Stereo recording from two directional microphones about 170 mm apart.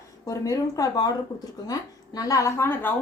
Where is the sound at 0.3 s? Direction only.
20° left (ahead or behind).